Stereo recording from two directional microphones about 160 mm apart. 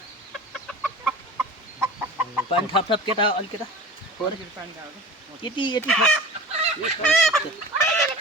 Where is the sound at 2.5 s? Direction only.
30° left (ahead or behind).